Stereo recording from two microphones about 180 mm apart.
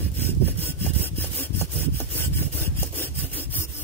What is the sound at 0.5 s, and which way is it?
Sawing, 10° left (ahead or behind).